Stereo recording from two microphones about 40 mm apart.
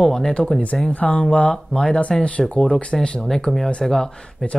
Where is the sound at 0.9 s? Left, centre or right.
Left.